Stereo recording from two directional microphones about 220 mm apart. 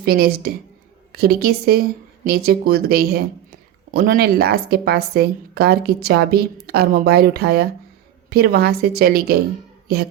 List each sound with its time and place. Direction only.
0.0 s speech: 45° right (ahead or behind)